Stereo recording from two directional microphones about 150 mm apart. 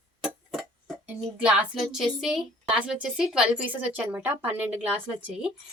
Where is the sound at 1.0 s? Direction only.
10° right (ahead or behind).